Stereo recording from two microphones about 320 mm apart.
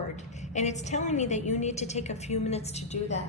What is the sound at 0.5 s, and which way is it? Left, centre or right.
A woman's voice, left.